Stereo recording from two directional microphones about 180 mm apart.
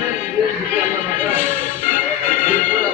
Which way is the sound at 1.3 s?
45° left (ahead or behind).